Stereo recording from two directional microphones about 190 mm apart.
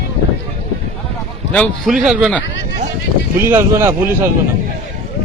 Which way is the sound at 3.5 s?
15° right (ahead or behind).